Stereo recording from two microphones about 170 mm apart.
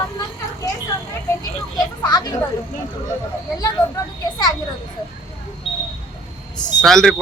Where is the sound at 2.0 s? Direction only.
25° left (ahead or behind).